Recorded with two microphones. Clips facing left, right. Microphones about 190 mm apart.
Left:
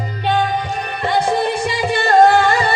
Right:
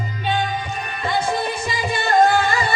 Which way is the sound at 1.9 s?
70° left (ahead or behind).